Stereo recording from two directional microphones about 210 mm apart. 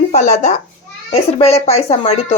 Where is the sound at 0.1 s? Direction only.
35° left (ahead or behind).